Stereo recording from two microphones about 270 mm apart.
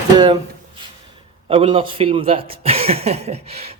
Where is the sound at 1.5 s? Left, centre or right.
Centre.